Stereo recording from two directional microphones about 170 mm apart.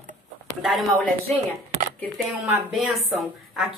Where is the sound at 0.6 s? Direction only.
Centre (ahead or behind).